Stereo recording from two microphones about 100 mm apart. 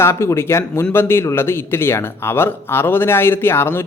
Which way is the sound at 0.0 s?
25° left (ahead or behind).